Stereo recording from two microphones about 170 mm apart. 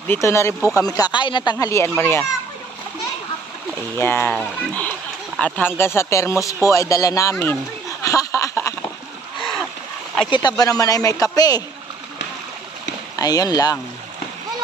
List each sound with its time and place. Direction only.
0.1 s speech: 15° left (ahead or behind)
4.0 s speech: 10° left (ahead or behind)
8.0 s a sound: 20° left (ahead or behind)
10.3 s speech: 25° left (ahead or behind)
13.1 s speech: 20° left (ahead or behind)